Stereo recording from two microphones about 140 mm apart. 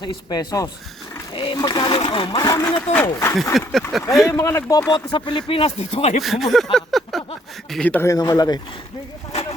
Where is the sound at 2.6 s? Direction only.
10° left (ahead or behind).